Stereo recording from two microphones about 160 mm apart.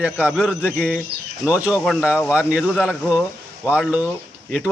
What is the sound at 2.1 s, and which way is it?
Speech, 15° left (ahead or behind).